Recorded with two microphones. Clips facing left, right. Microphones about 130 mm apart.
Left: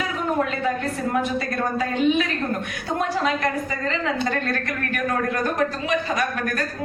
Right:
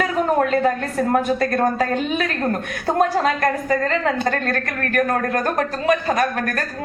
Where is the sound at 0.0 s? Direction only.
45° right (ahead or behind).